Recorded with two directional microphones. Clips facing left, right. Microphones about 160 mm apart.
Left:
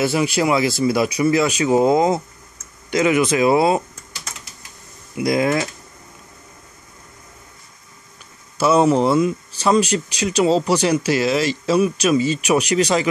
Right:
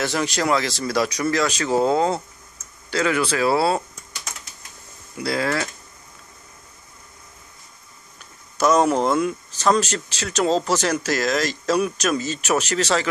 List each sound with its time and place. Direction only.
0.0 s speech: 10° left (ahead or behind)
5.1 s speech: 15° left (ahead or behind)
8.5 s speech: 5° left (ahead or behind)